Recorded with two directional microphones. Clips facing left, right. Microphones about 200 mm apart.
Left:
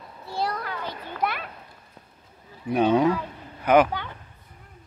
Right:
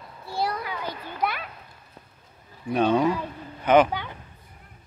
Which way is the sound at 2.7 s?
10° left (ahead or behind).